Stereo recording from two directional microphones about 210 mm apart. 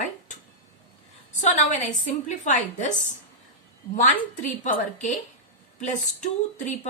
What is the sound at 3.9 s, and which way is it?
A woman's voice, 35° left (ahead or behind).